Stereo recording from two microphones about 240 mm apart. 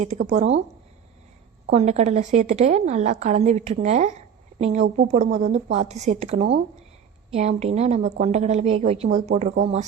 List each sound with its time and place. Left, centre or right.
0.0 s a woman's voice: right
1.6 s a woman's voice: right